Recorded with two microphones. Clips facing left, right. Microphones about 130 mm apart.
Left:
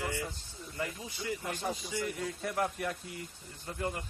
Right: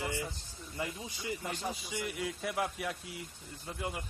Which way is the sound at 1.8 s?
5° right (ahead or behind).